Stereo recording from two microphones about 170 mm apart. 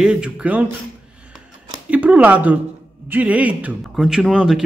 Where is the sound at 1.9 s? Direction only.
10° right (ahead or behind).